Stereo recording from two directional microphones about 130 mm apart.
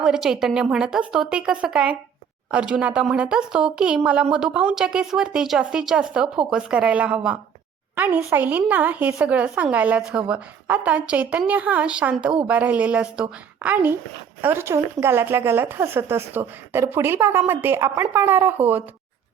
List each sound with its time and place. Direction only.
0.0 s a woman's voice: 5° right (ahead or behind)